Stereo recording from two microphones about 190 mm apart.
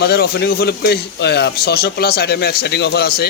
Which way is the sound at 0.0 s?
55° left (ahead or behind).